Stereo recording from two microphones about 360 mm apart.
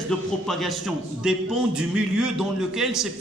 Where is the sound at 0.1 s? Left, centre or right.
Centre.